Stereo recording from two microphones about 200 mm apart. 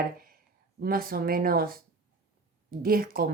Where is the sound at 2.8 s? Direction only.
50° right (ahead or behind).